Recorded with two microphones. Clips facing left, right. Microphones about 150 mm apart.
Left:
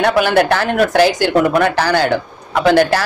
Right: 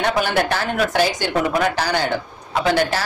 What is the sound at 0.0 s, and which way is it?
A woman's voice, 65° left (ahead or behind).